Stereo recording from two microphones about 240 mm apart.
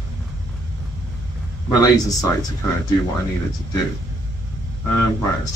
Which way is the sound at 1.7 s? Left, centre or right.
Centre.